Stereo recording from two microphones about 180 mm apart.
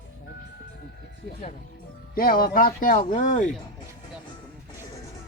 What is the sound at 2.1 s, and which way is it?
Speech, 55° left (ahead or behind).